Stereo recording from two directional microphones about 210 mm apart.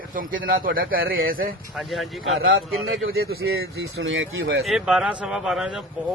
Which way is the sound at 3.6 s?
55° right (ahead or behind).